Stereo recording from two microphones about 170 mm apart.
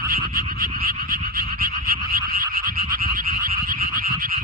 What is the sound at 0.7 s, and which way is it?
Frog, 60° right (ahead or behind).